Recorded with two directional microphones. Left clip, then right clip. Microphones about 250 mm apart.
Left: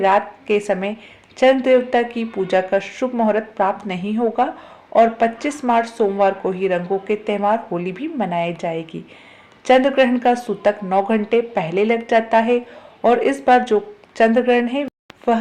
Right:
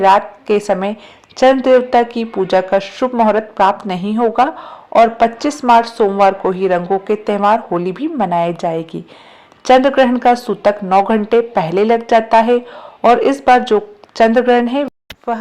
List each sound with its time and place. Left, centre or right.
0.0 s speech: centre